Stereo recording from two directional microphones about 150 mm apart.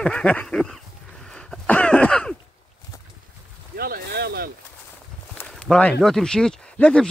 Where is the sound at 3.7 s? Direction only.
85° right.